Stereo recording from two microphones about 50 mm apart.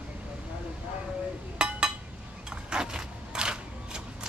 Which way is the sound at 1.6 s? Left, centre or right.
Centre.